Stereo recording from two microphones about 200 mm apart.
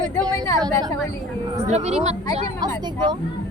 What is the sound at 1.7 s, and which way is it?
Speech, 35° right (ahead or behind).